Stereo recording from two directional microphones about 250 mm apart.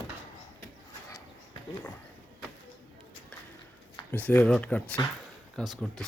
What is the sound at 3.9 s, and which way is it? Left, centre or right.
Speech, centre.